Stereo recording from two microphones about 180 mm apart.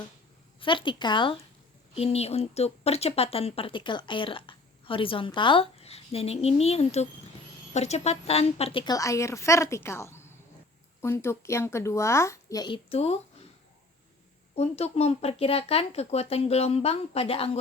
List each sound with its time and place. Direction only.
0.6 s a woman's voice: 25° left (ahead or behind)
14.5 s a woman's voice: 35° left (ahead or behind)